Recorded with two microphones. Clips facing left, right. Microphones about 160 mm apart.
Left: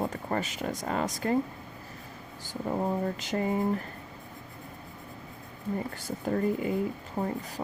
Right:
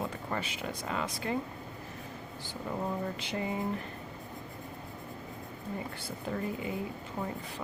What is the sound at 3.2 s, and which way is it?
Speech, 45° left (ahead or behind).